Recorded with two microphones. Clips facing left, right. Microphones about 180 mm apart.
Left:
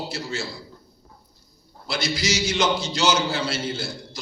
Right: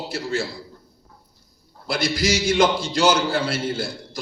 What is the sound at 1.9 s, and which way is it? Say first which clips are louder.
A man's voice: right 4 dB; 55° right (ahead or behind).